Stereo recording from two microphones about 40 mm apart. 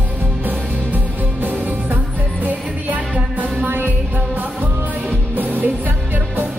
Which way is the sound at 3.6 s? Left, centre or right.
Right.